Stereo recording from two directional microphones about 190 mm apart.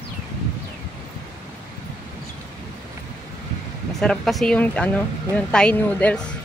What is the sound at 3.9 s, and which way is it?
Speech, 5° left (ahead or behind).